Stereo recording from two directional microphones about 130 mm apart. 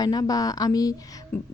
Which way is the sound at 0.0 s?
30° left (ahead or behind).